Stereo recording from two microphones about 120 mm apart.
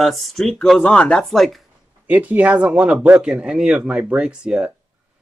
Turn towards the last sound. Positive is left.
turn(degrees=-5)  # may be behind; listen again after turning